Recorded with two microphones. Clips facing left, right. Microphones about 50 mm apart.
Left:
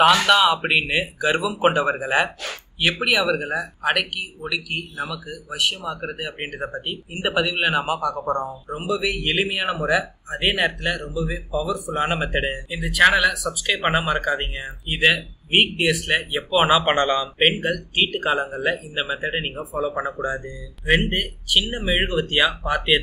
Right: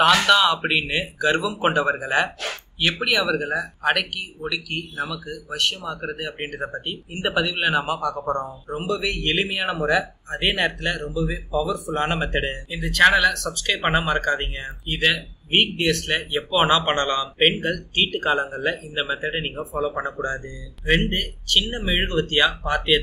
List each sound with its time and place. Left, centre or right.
0.3 s speech: centre
17.4 s speech: centre